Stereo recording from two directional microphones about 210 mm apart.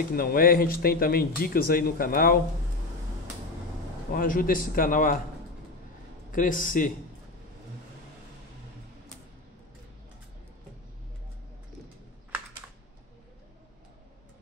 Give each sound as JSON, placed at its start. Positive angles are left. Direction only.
{"t": 0.1, "sound": "speech", "side_deg": 45}
{"t": 4.1, "sound": "a man's voice", "side_deg": 40}
{"t": 6.3, "sound": "a man's voice", "side_deg": 40}